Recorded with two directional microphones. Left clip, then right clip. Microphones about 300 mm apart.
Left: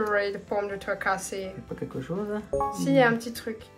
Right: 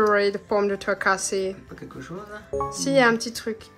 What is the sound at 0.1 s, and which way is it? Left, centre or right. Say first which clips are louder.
Speech: right 5 dB; centre.